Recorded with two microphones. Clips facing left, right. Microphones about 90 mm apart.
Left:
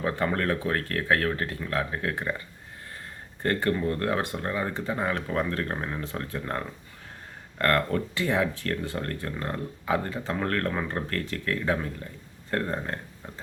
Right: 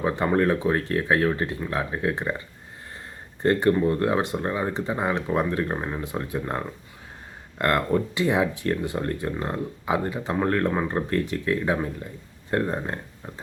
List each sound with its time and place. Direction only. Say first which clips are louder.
0.0 s speech: right 5 dB; 20° right (ahead or behind)
3.4 s speech: right 6 dB; 20° right (ahead or behind)